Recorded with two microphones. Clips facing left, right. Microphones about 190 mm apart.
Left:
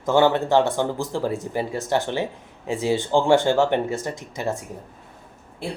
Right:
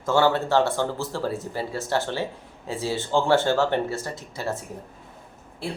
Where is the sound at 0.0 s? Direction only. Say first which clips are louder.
Left 3 dB; 15° left (ahead or behind).